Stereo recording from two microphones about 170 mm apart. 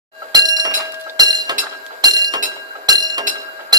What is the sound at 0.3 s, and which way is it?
Chink, 25° right (ahead or behind).